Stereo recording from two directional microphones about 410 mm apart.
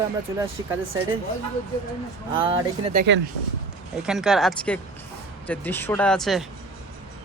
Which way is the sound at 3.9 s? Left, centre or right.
Centre.